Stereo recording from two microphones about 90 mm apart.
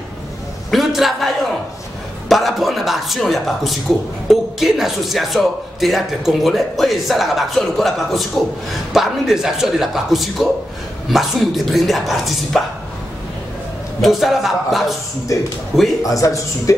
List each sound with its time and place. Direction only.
0.7 s a sound: centre (ahead or behind)
2.2 s speech: centre (ahead or behind)
14.0 s speech: centre (ahead or behind)
16.0 s a man's voice: 40° left (ahead or behind)